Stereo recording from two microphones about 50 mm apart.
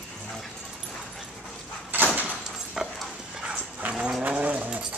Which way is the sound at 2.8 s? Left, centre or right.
Centre.